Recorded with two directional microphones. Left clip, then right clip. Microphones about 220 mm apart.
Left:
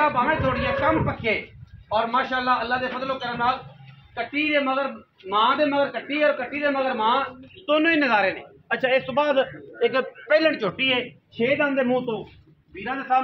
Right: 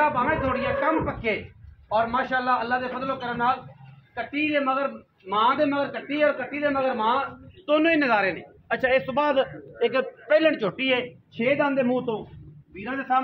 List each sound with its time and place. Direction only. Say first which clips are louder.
0.0 s a man's voice: left 2 dB; 15° right (ahead or behind)
9.8 s a man's voice: left 1 dB; 5° right (ahead or behind)
10.9 s speech: left 1 dB; 15° right (ahead or behind)
11.5 s a man's voice: left 1 dB; 30° right (ahead or behind)